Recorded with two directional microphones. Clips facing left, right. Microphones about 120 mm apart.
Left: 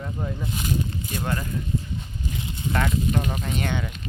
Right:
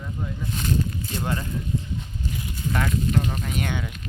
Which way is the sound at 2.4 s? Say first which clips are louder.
Even; 25° left (ahead or behind).